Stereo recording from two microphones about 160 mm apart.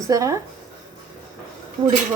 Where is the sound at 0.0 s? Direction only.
20° right (ahead or behind).